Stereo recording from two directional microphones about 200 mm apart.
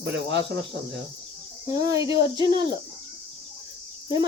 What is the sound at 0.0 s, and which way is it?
Speech, 65° right (ahead or behind).